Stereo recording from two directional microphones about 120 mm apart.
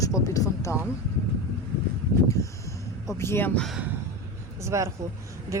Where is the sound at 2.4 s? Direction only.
25° left (ahead or behind).